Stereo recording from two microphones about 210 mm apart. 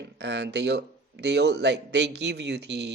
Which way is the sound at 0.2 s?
55° right (ahead or behind).